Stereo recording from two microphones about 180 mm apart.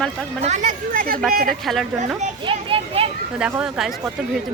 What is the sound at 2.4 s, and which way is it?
Children playing, 30° right (ahead or behind).